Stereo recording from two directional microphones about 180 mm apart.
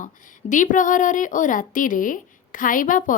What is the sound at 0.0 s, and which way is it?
A woman's voice, 45° left (ahead or behind).